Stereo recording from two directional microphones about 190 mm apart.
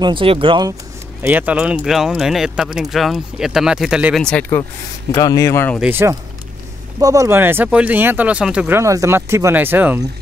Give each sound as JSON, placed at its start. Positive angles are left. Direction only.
{"t": 0.0, "sound": "speech", "side_deg": -25}
{"t": 1.2, "sound": "speech", "side_deg": -10}
{"t": 5.1, "sound": "speech", "side_deg": 20}
{"t": 5.8, "sound": "speech", "side_deg": -10}